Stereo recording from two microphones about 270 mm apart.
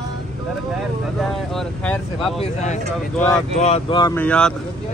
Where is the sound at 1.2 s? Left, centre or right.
Centre.